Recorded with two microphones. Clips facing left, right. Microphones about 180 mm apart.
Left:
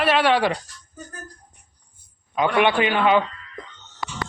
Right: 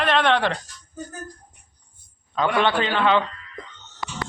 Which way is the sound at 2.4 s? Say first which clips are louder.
Left 2 dB; 15° left (ahead or behind).